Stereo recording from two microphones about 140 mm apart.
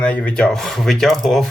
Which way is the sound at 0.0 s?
10° left (ahead or behind).